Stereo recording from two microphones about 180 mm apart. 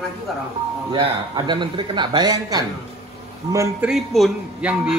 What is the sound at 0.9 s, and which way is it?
A man's voice, 25° right (ahead or behind).